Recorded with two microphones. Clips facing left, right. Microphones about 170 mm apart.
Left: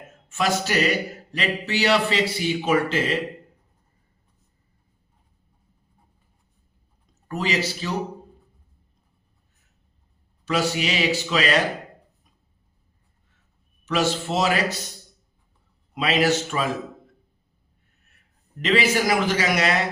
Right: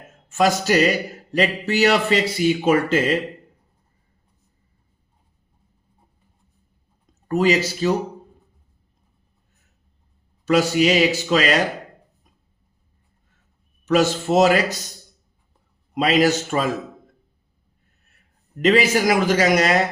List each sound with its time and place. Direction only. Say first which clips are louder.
0.3 s a man's voice: right 6 dB; 40° right (ahead or behind)
7.3 s speech: right 7 dB; 45° right (ahead or behind)
10.4 s speech: right 7 dB; 45° right (ahead or behind)
13.8 s speech: right 5 dB; 45° right (ahead or behind)
16.0 s a man's voice: right 4 dB; 40° right (ahead or behind)
18.6 s speech: right 4 dB; 45° right (ahead or behind)